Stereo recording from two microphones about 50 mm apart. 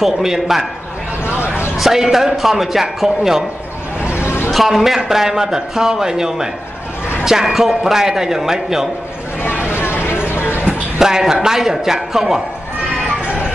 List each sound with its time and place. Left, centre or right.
0.0 s a man's voice: centre
1.8 s a man's voice: centre
4.1 s vehicle: left
4.5 s a man's voice: centre
9.7 s vehicle: left
11.0 s a man's voice: centre